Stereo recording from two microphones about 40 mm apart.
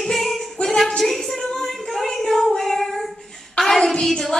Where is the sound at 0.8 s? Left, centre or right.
Centre.